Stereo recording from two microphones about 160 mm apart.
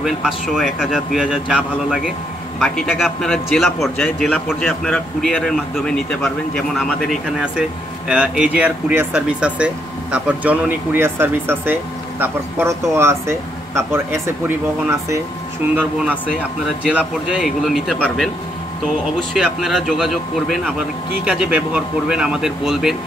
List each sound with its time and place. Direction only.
0.0 s speech: centre (ahead or behind)
2.6 s speech: 5° left (ahead or behind); by 15.2 s 20° right (ahead or behind)
16.0 s speech: 5° right (ahead or behind)